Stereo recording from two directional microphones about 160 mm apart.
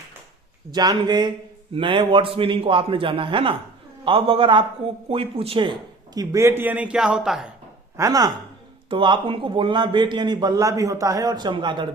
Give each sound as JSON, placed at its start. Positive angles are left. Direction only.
{"t": 0.7, "sound": "a man's voice", "side_deg": -25}
{"t": 6.1, "sound": "a man's voice", "side_deg": -20}
{"t": 7.9, "sound": "a man's voice", "side_deg": -20}